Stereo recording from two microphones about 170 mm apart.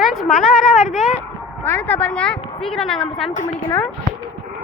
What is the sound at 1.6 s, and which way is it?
A woman's voice, 10° left (ahead or behind).